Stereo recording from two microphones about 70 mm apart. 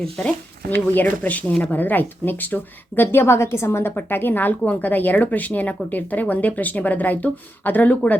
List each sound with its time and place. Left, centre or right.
0.0 s speech: centre
0.9 s speech: left